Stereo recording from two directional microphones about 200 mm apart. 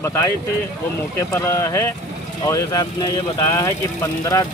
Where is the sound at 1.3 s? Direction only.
15° left (ahead or behind).